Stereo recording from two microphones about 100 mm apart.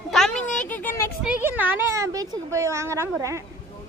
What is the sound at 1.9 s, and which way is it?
A child's voice, 35° right (ahead or behind).